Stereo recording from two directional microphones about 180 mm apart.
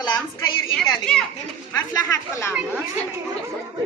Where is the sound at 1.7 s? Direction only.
20° left (ahead or behind).